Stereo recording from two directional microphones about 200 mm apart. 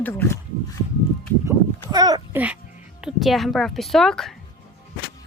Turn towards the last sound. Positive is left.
turn(degrees=0)  # may be behind; listen again after turning